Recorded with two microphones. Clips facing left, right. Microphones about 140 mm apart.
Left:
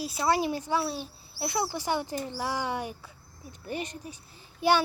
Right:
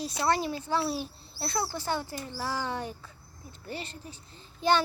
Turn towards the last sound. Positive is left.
turn(degrees=10)  # may be behind; listen again after turning